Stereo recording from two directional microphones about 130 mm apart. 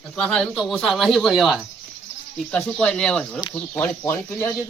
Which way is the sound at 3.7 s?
20° left (ahead or behind).